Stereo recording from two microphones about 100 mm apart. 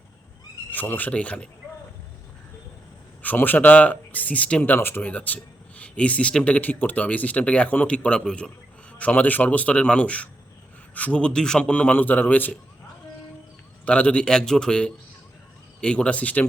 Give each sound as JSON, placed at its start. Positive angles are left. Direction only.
{"t": 0.7, "sound": "speech", "side_deg": 15}
{"t": 3.2, "sound": "speech", "side_deg": 20}
{"t": 13.8, "sound": "speech", "side_deg": 10}